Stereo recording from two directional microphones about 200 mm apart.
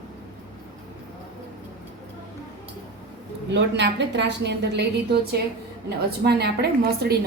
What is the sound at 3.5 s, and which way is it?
A woman's voice, 60° right (ahead or behind).